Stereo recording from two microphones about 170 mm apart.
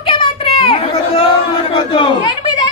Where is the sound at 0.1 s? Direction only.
30° left (ahead or behind).